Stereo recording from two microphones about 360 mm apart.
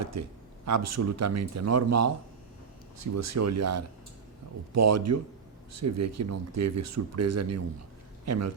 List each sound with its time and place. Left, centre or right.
0.0 s speech: right